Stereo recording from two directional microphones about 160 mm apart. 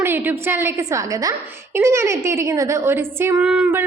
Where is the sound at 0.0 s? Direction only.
15° right (ahead or behind).